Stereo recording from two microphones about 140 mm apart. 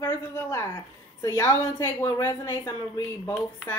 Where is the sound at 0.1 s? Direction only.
20° left (ahead or behind).